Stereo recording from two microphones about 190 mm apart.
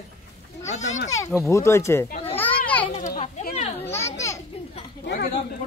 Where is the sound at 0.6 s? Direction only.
35° left (ahead or behind).